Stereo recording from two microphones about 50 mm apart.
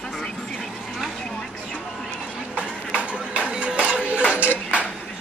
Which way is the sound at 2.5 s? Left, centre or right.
Right.